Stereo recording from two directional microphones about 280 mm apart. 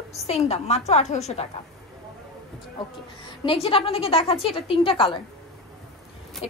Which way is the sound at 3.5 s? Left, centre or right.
Centre.